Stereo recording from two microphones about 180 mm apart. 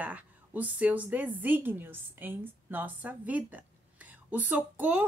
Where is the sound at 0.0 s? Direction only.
10° right (ahead or behind).